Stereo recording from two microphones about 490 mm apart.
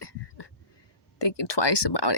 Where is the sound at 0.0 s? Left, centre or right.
Left.